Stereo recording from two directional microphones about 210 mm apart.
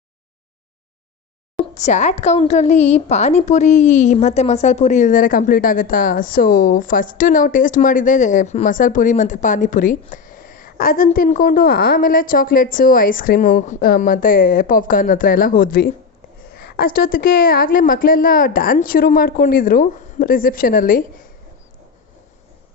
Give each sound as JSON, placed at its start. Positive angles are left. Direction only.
{"t": 1.7, "sound": "a woman's voice", "side_deg": 35}